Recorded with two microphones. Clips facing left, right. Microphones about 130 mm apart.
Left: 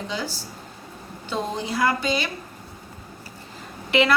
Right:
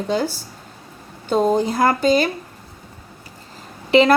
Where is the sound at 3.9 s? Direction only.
35° right (ahead or behind).